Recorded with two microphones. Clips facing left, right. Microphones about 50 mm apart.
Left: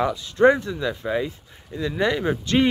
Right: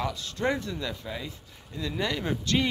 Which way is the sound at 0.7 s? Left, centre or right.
Centre.